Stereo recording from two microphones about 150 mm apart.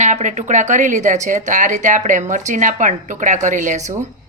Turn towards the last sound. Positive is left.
turn(degrees=-55)  # may be behind; listen again after turning